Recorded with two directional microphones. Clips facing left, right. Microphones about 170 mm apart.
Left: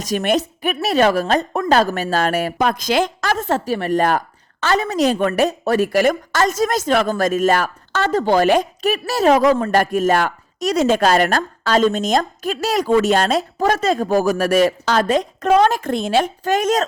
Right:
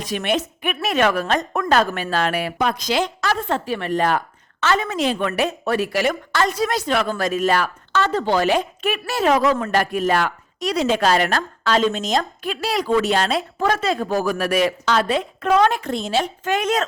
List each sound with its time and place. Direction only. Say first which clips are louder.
0.0 s a woman's voice: left 4 dB; 40° left (ahead or behind)
16.4 s a woman's voice: left 3 dB; 40° left (ahead or behind)